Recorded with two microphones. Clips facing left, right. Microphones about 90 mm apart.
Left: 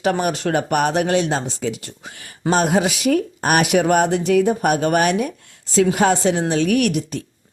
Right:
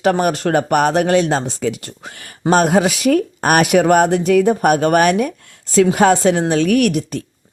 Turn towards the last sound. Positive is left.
turn(degrees=-45)  # may be behind; listen again after turning